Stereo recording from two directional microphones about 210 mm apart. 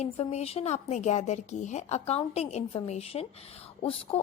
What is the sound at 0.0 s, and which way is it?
A woman's voice, 30° left (ahead or behind).